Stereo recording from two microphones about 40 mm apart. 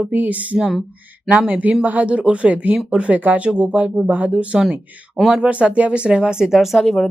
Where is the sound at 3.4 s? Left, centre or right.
Right.